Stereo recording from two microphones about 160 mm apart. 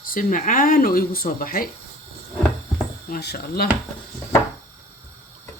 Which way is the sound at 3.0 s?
80° left.